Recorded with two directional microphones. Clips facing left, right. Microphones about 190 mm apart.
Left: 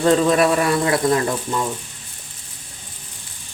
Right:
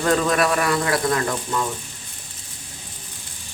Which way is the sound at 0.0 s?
25° left (ahead or behind).